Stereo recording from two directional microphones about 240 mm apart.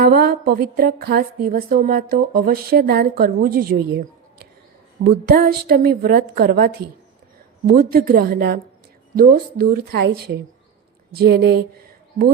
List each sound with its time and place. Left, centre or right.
0.0 s speech: right
5.3 s speech: right
11.2 s speech: right